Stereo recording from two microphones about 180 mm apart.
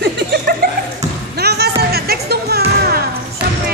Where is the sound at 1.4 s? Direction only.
65° right (ahead or behind).